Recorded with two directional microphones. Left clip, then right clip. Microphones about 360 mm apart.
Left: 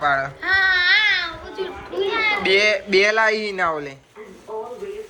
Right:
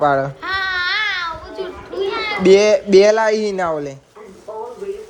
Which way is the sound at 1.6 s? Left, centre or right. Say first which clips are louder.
Right 1 dB; centre.